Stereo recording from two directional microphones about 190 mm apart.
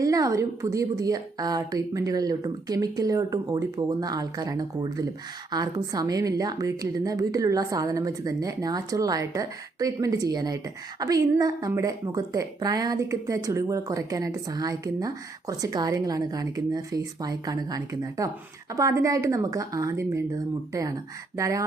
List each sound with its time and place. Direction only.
0.0 s speech: 20° right (ahead or behind)